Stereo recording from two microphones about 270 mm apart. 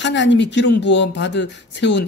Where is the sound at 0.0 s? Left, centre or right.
Left.